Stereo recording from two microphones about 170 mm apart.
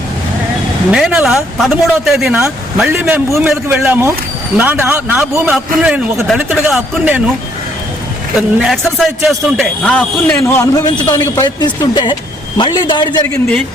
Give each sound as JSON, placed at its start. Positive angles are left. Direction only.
{"t": 0.9, "sound": "a man's voice", "side_deg": -5}
{"t": 8.4, "sound": "a man's voice", "side_deg": 0}
{"t": 10.9, "sound": "speech", "side_deg": 25}